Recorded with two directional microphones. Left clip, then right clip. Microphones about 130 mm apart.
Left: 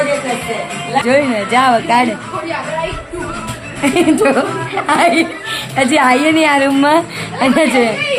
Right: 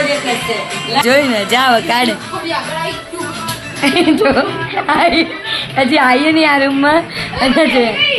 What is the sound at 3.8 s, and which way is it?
A woman's voice, 10° left (ahead or behind).